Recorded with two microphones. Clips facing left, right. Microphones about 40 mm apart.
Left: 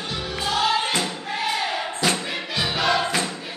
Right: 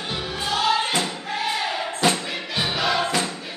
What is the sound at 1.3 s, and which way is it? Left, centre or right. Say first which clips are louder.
Crowd: even; centre.